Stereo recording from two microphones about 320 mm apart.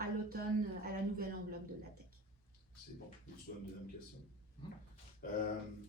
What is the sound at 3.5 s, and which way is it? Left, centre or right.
Speech, left.